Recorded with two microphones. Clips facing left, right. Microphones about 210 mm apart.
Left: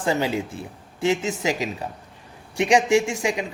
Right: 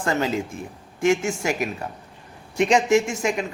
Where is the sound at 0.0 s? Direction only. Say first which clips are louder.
Even; 15° left (ahead or behind).